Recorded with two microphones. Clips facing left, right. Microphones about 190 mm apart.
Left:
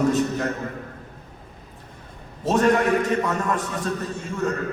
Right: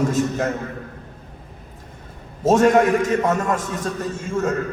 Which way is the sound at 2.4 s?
45° right (ahead or behind).